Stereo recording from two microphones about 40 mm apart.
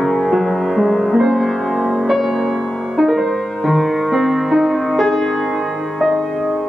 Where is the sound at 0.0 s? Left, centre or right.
Centre.